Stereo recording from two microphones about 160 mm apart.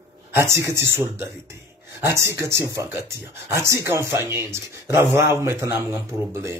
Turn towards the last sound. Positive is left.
turn(degrees=-20)  # may be behind; listen again after turning